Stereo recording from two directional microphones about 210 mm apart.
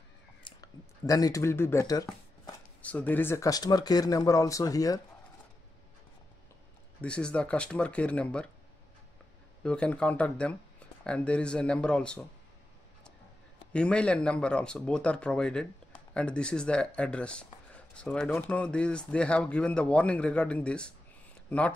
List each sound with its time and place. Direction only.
0.4 s speech: 20° left (ahead or behind)
7.0 s speech: 5° left (ahead or behind)
9.6 s speech: 5° left (ahead or behind)
13.7 s speech: 5° left (ahead or behind)